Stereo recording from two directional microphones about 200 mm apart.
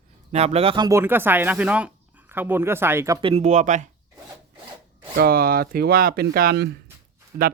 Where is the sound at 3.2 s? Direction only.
30° right (ahead or behind).